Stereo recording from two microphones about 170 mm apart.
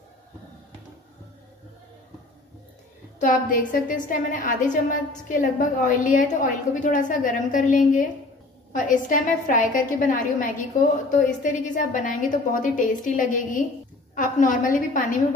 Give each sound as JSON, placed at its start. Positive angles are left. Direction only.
{"t": 3.2, "sound": "a woman's voice", "side_deg": 50}